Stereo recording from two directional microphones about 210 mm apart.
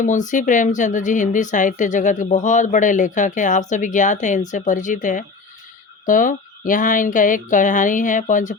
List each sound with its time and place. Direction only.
0.0 s speech: 35° left (ahead or behind)